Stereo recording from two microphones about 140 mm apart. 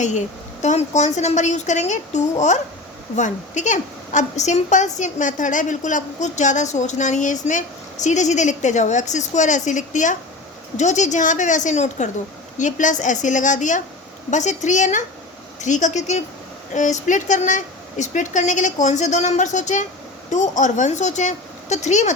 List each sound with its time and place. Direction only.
0.6 s a woman's voice: 55° left (ahead or behind)